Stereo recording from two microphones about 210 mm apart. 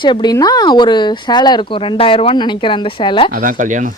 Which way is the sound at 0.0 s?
20° left (ahead or behind).